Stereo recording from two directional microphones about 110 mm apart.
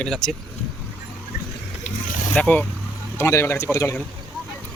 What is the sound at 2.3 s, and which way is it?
Speech, 10° left (ahead or behind).